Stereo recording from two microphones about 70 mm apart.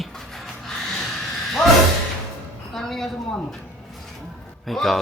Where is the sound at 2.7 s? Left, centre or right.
Centre.